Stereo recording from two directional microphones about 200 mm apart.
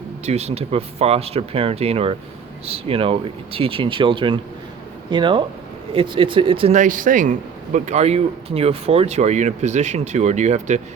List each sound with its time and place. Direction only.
0.3 s speech: 30° right (ahead or behind)